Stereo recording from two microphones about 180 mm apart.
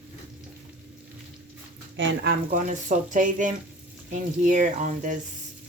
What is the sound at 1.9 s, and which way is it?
Speech, 80° right.